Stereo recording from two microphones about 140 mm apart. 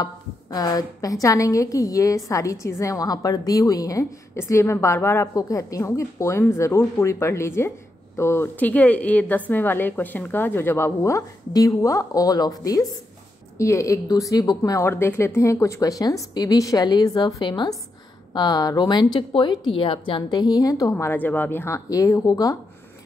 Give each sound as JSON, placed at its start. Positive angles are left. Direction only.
{"t": 0.0, "sound": "a woman's voice", "side_deg": 30}